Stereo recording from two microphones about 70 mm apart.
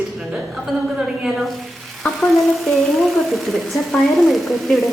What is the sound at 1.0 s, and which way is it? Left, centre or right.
Frying, centre.